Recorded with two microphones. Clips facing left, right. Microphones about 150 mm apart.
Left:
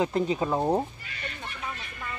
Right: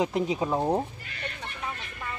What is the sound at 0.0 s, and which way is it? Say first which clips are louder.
Speech: left 1 dB; 10° right (ahead or behind).